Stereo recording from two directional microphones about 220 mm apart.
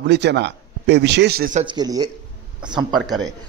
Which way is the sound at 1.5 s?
20° right (ahead or behind).